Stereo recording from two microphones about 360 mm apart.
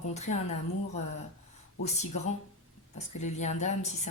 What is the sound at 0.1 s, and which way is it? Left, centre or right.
Speech, centre.